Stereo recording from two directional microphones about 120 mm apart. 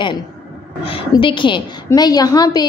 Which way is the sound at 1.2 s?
45° left (ahead or behind).